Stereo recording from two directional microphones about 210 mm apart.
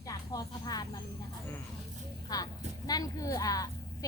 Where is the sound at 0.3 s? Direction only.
20° left (ahead or behind).